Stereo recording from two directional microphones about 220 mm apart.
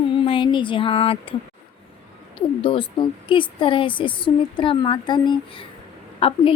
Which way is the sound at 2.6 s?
20° left (ahead or behind).